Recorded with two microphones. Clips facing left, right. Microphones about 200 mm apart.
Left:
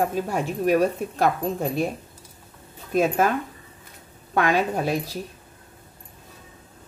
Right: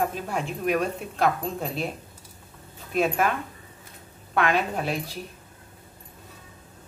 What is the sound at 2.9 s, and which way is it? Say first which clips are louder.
Speech: left 3 dB; 40° left (ahead or behind).